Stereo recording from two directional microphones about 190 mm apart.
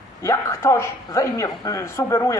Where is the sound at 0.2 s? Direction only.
15° left (ahead or behind).